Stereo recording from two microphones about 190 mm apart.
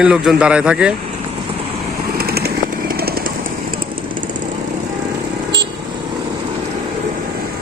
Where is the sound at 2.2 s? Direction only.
55° right (ahead or behind).